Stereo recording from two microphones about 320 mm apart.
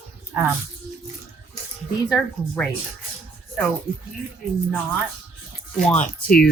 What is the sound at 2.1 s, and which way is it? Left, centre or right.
Speech, centre.